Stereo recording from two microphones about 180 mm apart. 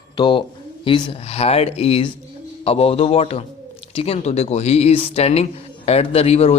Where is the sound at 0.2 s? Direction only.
25° left (ahead or behind).